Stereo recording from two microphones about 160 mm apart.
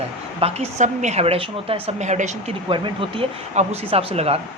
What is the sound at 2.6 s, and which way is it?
Speech, 30° right (ahead or behind).